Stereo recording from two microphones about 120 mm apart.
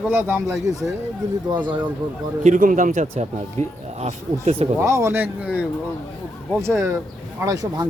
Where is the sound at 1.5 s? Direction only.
40° right (ahead or behind).